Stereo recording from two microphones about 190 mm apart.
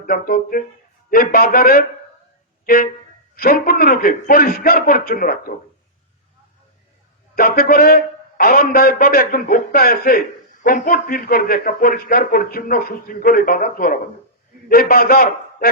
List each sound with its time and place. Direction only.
0.0 s a man's voice: 50° left (ahead or behind)
7.3 s a man's voice: 50° left (ahead or behind)